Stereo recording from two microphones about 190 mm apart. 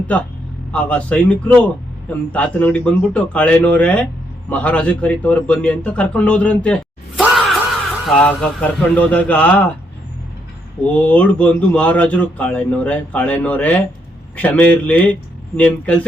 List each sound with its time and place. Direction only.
0.1 s a man's voice: 5° left (ahead or behind)
8.0 s a man's voice: 5° left (ahead or behind)
10.8 s a man's voice: 5° left (ahead or behind)